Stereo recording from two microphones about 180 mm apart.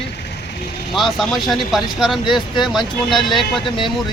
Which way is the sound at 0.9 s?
Centre (ahead or behind).